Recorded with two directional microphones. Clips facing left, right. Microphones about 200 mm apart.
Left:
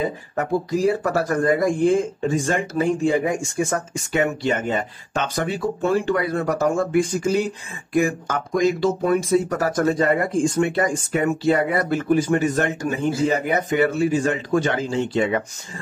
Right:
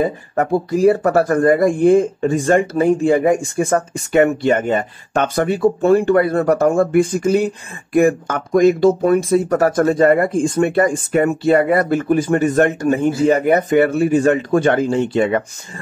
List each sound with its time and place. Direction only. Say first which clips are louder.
0.4 s speech: right 6 dB; 60° right (ahead or behind)